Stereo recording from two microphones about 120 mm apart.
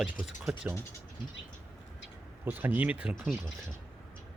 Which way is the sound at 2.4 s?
15° right (ahead or behind).